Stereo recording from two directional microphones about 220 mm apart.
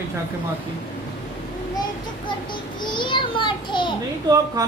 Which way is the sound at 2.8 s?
20° left (ahead or behind).